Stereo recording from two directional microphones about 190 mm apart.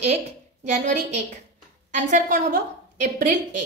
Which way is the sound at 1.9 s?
45° right (ahead or behind).